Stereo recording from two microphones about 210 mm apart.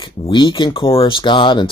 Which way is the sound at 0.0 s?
20° left (ahead or behind).